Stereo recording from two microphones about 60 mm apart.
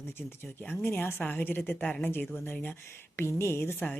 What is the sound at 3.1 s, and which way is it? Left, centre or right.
Speech, left.